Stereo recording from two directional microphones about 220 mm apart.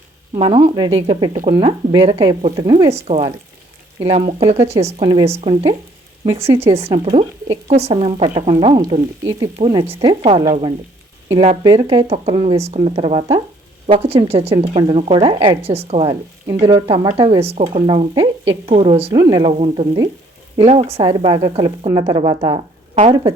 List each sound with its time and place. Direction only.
0.3 s a woman's voice: 25° right (ahead or behind)
2.9 s a woman's voice: 30° right (ahead or behind)
11.6 s a woman's voice: 20° right (ahead or behind)